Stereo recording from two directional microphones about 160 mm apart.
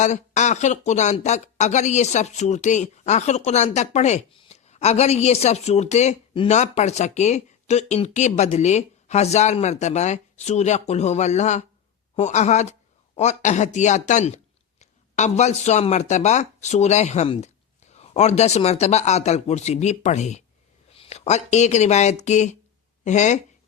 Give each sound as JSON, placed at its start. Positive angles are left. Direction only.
{"t": 0.0, "sound": "speech", "side_deg": 50}